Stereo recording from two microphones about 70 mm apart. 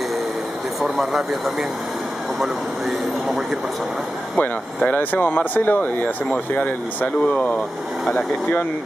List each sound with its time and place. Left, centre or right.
0.8 s speech: centre
4.4 s speech: left
7.3 s speech: centre